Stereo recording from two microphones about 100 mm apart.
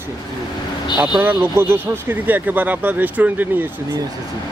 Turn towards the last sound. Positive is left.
turn(degrees=-15)  # may be behind; listen again after turning